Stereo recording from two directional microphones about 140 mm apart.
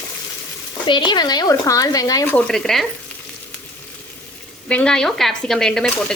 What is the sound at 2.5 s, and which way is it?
Speech, 5° left (ahead or behind).